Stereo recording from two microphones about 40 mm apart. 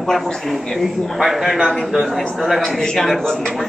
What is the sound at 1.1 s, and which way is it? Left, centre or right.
A man's voice, centre.